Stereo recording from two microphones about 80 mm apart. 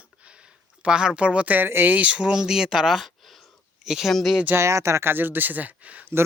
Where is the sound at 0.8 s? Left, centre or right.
Centre.